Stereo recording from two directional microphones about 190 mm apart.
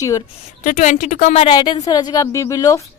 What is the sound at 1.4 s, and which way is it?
A woman's voice, 25° left (ahead or behind).